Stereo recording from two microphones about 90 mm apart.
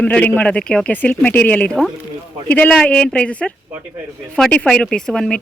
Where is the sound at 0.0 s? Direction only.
15° left (ahead or behind).